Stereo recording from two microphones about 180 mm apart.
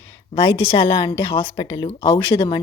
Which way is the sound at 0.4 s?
35° left (ahead or behind).